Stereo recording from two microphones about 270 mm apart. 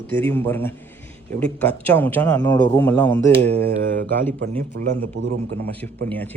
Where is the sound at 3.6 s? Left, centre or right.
Right.